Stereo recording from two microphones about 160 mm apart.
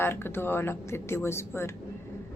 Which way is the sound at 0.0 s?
15° left (ahead or behind).